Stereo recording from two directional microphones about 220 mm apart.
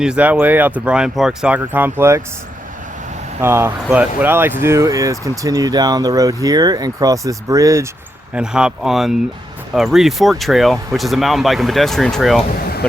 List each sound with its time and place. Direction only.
0.0 s speech: 5° right (ahead or behind)
3.4 s speech: 10° right (ahead or behind)
8.4 s speech: 5° right (ahead or behind)